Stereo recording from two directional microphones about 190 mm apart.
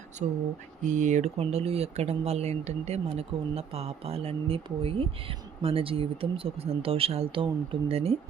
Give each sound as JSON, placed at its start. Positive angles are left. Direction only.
{"t": 0.2, "sound": "speech", "side_deg": -35}